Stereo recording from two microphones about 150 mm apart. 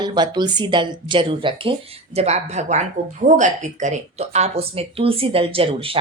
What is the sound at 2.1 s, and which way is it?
Speech, 45° right (ahead or behind).